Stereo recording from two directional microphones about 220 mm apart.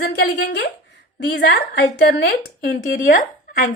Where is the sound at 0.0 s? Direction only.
45° left (ahead or behind).